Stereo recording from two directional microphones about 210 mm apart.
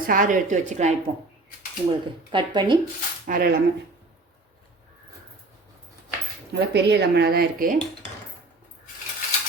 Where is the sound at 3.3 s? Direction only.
40° right (ahead or behind).